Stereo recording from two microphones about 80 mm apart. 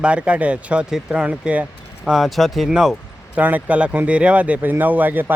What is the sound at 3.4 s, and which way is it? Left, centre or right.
Speech, right.